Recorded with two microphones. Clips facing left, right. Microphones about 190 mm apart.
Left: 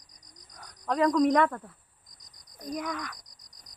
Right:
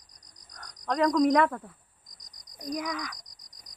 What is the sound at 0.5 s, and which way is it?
Speech, 5° left (ahead or behind).